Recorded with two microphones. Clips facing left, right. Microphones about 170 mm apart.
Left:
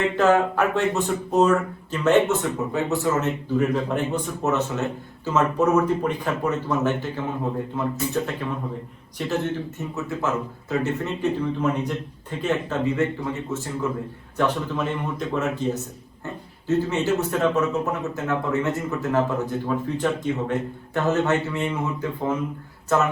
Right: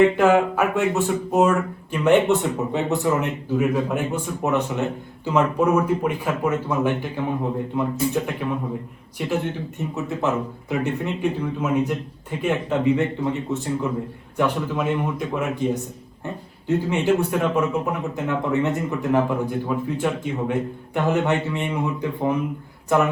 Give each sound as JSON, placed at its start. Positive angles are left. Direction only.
{"t": 0.2, "sound": "speech", "side_deg": -10}
{"t": 1.3, "sound": "speech", "side_deg": -15}